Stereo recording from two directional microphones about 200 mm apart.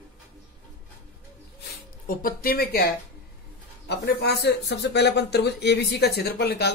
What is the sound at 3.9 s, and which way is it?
Speech, 55° left (ahead or behind).